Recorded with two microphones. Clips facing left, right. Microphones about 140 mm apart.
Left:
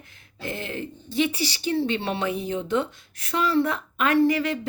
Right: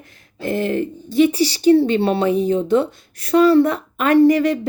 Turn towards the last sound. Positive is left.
turn(degrees=-40)  # may be behind; listen again after turning